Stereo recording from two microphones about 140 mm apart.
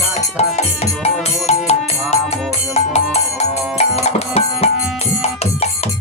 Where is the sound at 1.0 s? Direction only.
50° left (ahead or behind).